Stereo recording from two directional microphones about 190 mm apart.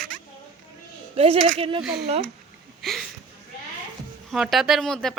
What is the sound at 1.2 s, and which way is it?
Speech, 30° right (ahead or behind).